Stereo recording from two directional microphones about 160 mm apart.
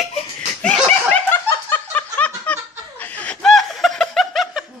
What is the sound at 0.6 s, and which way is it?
Laughter, 5° left (ahead or behind).